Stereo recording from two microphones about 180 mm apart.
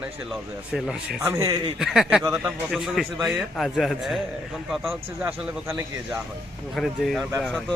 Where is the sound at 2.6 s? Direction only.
Centre (ahead or behind).